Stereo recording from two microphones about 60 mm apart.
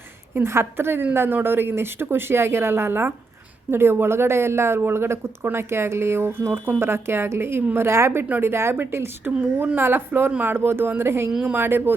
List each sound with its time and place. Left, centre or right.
0.3 s a woman's voice: right
8.2 s speech: right